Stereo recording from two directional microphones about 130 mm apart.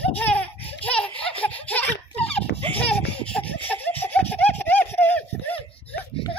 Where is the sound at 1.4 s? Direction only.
10° left (ahead or behind).